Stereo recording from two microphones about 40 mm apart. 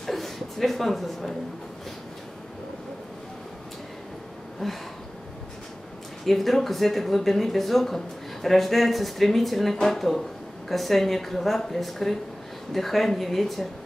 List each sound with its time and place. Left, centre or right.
0.0 s a sound: centre
4.6 s speech: centre
6.2 s speech: centre